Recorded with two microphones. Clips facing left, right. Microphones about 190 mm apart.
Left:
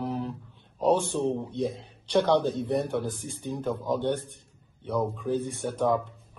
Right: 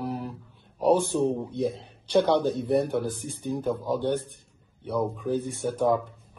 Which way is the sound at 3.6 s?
Centre (ahead or behind).